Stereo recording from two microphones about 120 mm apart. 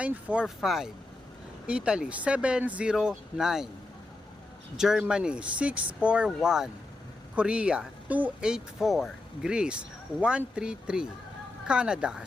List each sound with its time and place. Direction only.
0.0 s speech: 10° right (ahead or behind)
4.8 s speech: 5° right (ahead or behind)